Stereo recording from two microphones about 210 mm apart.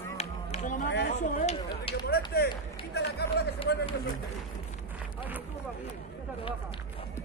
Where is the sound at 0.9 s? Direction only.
50° left (ahead or behind).